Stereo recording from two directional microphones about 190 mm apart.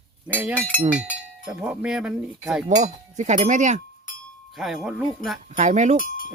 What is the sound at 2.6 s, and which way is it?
Speech, 40° right (ahead or behind).